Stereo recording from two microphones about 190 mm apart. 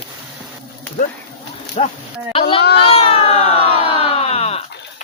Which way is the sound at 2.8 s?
30° left (ahead or behind).